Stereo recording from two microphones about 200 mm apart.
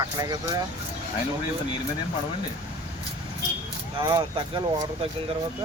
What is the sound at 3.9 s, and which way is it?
Speech, 20° right (ahead or behind).